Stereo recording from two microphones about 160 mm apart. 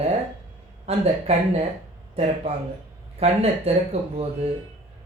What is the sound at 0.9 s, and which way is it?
Speech, 40° right (ahead or behind).